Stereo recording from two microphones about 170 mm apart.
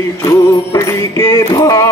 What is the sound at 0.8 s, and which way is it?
Music, 15° left (ahead or behind).